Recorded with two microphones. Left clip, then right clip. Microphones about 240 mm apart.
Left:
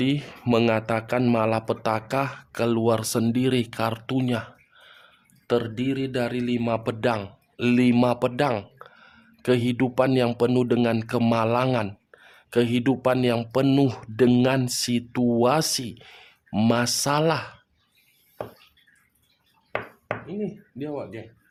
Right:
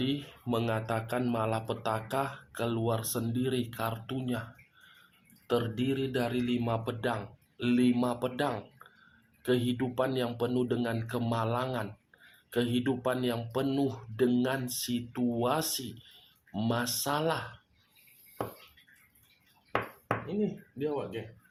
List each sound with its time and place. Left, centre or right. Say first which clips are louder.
0.0 s speech: left 8 dB; left
20.4 s speech: left 1 dB; left